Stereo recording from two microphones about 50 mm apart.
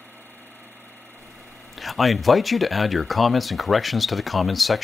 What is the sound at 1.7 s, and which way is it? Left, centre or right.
Speech, centre.